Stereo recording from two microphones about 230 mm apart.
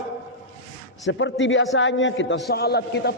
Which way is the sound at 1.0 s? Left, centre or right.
Left.